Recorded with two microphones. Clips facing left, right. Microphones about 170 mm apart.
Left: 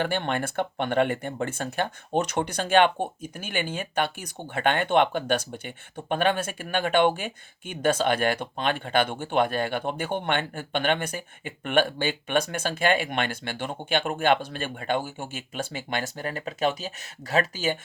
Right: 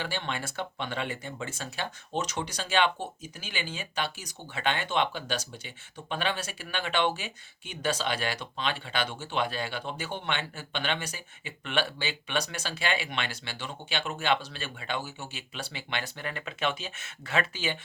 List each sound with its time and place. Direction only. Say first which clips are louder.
0.0 s speech: left 7 dB; 55° left (ahead or behind)